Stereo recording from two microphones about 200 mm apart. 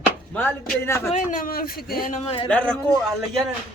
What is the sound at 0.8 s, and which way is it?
Speech, 10° left (ahead or behind).